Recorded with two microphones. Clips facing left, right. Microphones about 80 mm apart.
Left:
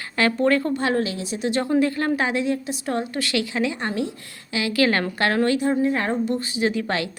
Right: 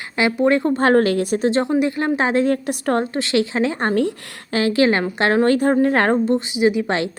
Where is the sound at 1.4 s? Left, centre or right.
Right.